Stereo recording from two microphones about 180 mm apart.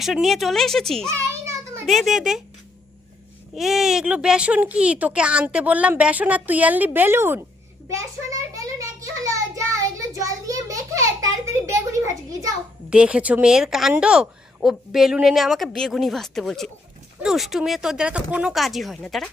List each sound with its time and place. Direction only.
0.0 s a woman's voice: centre (ahead or behind)
1.0 s child singing: 15° right (ahead or behind)
1.9 s a woman's voice: centre (ahead or behind)
3.5 s speech: centre (ahead or behind)
7.9 s a sound: 20° right (ahead or behind)
12.9 s a woman's voice: 5° right (ahead or behind)